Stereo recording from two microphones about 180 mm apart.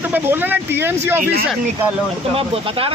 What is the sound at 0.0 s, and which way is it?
Speech, 10° right (ahead or behind).